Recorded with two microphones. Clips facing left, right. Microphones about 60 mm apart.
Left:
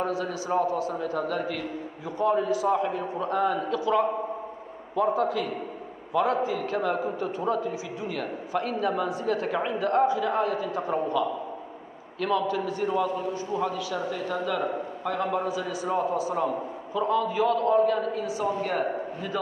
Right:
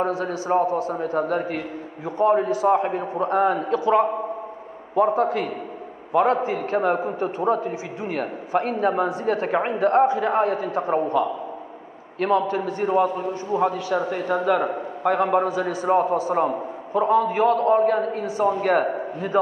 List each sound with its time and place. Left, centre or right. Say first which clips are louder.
0.0 s a man's voice: right 4 dB; right